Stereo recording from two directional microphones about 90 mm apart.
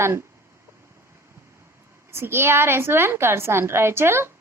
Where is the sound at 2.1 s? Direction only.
25° right (ahead or behind).